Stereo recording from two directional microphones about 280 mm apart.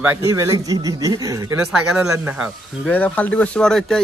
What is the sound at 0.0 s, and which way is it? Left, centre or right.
Speech, centre.